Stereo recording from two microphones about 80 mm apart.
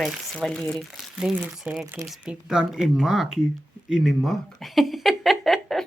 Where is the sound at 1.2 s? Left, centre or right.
Centre.